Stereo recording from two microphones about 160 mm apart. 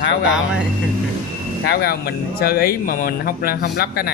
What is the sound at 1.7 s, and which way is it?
Speech, 80° left.